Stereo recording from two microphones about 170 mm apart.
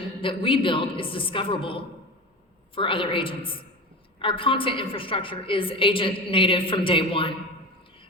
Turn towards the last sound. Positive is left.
turn(degrees=30)  # may be behind; listen again after turning